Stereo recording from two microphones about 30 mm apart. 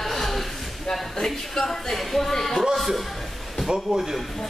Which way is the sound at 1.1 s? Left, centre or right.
Centre.